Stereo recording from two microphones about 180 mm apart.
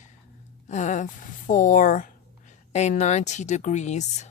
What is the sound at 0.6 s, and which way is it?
A woman's voice, 40° left (ahead or behind).